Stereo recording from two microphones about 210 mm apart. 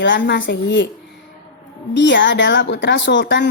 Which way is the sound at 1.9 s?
60° left (ahead or behind).